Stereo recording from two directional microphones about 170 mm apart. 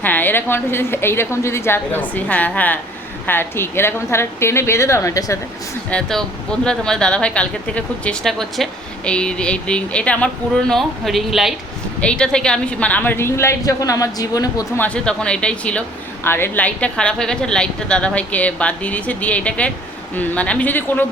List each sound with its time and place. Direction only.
0.0 s a woman's voice: 10° left (ahead or behind)
5.9 s a woman's voice: 5° left (ahead or behind); by 14.7 s 20° left (ahead or behind)
14.8 s a woman's voice: 5° left (ahead or behind)